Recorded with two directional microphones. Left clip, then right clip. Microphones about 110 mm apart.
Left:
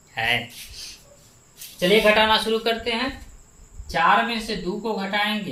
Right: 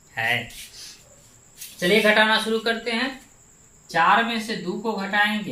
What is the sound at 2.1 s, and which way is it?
Speech, 40° left (ahead or behind).